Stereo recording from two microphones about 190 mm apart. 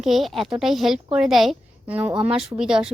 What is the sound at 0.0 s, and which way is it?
Speech, centre (ahead or behind).